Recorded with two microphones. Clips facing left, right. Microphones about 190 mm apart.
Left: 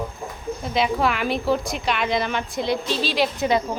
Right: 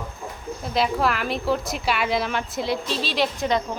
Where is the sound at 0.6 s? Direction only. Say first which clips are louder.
Left 1 dB; centre (ahead or behind).